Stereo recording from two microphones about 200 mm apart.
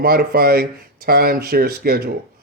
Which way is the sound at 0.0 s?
50° right (ahead or behind).